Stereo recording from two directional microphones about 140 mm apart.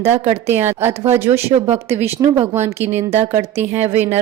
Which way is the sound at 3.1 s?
50° right (ahead or behind).